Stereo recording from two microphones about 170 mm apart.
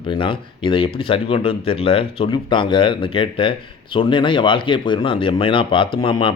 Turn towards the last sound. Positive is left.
turn(degrees=30)  # may be behind; listen again after turning